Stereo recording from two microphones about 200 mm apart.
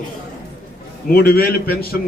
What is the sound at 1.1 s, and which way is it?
Speech, 50° left (ahead or behind).